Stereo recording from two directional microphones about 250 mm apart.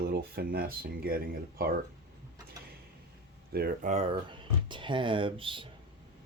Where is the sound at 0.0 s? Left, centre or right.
Right.